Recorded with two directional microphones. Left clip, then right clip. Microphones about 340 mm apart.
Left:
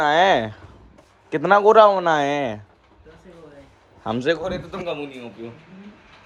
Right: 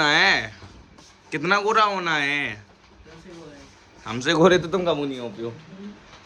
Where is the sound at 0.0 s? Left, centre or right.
Centre.